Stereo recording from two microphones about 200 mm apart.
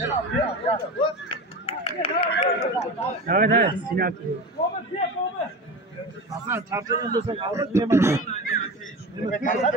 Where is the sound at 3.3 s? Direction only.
45° right (ahead or behind).